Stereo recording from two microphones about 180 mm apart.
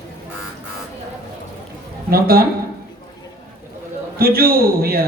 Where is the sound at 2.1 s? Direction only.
55° right (ahead or behind).